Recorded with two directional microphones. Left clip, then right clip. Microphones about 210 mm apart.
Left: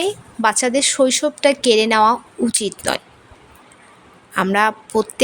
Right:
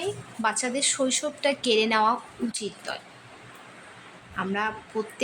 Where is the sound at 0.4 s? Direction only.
35° left (ahead or behind).